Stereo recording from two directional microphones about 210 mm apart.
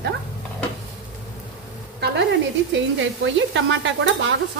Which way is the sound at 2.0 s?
55° right (ahead or behind).